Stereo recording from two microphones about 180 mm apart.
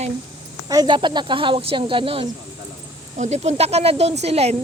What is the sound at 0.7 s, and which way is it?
Speech, 25° right (ahead or behind).